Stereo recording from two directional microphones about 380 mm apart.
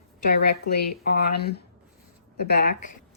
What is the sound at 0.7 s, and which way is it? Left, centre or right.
A woman's voice, left.